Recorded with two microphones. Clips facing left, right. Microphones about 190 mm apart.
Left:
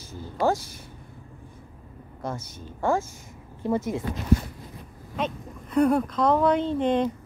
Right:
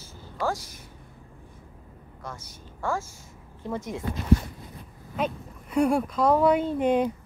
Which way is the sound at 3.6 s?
5° left (ahead or behind).